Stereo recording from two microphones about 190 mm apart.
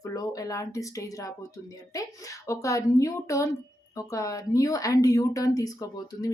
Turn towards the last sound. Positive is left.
turn(degrees=20)  # may be behind; listen again after turning